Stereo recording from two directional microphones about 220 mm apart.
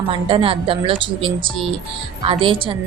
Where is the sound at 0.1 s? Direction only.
25° right (ahead or behind).